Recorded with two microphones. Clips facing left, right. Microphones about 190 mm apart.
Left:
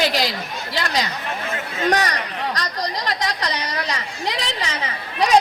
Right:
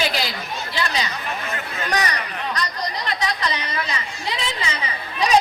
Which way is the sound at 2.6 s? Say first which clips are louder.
Left 1 dB; 75° left (ahead or behind).